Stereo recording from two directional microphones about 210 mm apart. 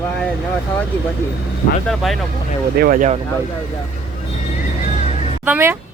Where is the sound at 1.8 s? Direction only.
Centre (ahead or behind).